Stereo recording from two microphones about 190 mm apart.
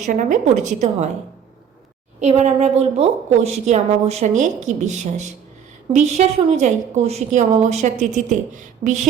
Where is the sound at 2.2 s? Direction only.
35° right (ahead or behind).